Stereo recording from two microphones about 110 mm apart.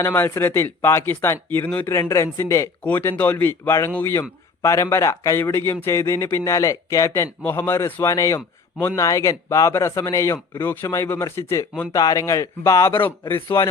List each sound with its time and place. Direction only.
0.0 s speech: 25° left (ahead or behind)
1.9 s speech: 25° left (ahead or behind)